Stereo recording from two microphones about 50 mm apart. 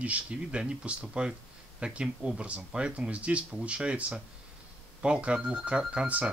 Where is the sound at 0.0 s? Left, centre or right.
Right.